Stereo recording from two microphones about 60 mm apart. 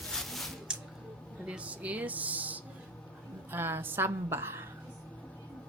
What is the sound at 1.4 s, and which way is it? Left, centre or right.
Speech, right.